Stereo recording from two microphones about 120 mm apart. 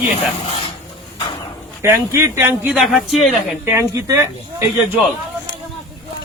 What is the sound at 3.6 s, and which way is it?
Speech, 25° right (ahead or behind).